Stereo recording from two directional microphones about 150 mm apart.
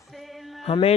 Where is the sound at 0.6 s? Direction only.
40° left (ahead or behind).